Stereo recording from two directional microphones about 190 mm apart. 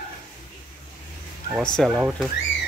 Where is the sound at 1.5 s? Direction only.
Centre (ahead or behind).